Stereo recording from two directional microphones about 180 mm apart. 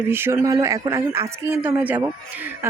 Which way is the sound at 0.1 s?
10° right (ahead or behind).